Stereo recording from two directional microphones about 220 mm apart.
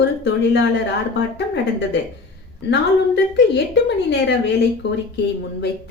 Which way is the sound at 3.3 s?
55° left (ahead or behind).